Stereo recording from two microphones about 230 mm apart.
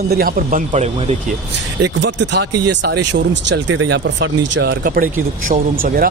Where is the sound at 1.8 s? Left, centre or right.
Right.